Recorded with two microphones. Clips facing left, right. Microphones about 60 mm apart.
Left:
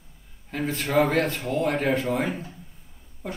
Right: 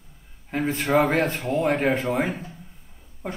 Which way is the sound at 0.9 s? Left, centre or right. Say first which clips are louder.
Right 1 dB; centre.